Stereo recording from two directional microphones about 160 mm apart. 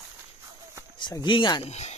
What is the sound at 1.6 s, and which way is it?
Speech, 45° left (ahead or behind).